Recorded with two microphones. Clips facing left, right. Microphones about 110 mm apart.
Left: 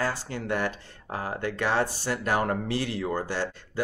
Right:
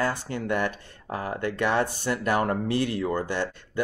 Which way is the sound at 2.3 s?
50° right (ahead or behind).